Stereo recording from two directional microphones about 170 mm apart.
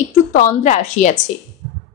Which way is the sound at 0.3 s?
50° left (ahead or behind).